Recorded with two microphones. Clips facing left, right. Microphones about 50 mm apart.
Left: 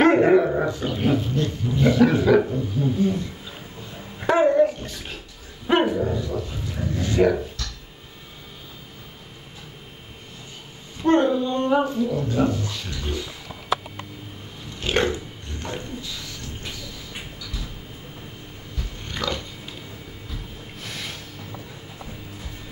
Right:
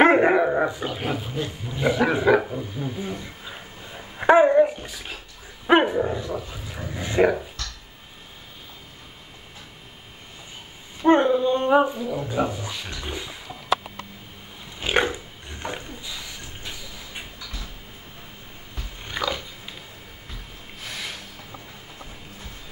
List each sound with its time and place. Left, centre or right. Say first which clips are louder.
0.0 s dog: left 1 dB; right
0.8 s speech: left 5 dB; centre
2.5 s a sound: left 6 dB; centre
5.7 s dog: right 2 dB; right
6.3 s speech: left 3 dB; centre
11.0 s speech: right 1 dB; centre
14.8 s a sound: even; centre
19.0 s biting: right 1 dB; centre
20.8 s a sound: right 1 dB; centre